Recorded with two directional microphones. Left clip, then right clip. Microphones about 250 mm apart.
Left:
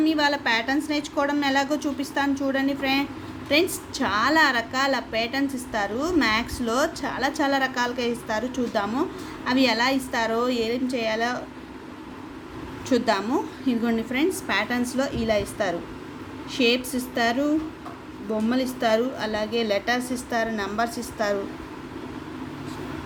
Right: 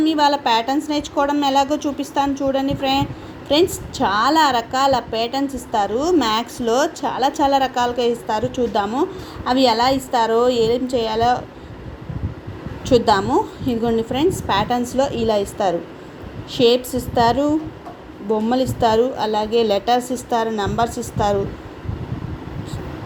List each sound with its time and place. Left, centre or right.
0.0 s a woman's voice: centre
12.9 s a woman's voice: centre